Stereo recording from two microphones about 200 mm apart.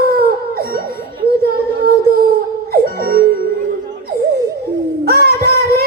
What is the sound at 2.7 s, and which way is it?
Music, 50° right (ahead or behind).